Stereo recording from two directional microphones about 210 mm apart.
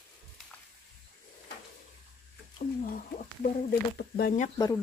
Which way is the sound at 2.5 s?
40° left (ahead or behind).